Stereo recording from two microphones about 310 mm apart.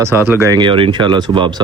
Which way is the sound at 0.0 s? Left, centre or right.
Centre.